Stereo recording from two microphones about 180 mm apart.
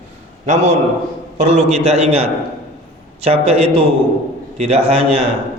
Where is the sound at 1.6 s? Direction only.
35° right (ahead or behind).